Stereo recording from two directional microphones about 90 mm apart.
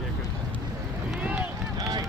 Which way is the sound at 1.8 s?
45° right (ahead or behind).